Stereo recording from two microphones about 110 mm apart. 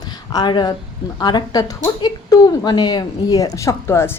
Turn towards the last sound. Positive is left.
turn(degrees=20)  # may be behind; listen again after turning